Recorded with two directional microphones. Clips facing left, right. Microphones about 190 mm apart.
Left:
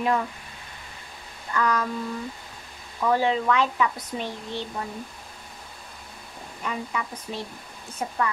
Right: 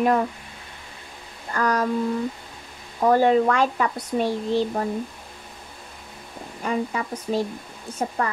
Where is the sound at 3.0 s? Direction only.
45° right (ahead or behind).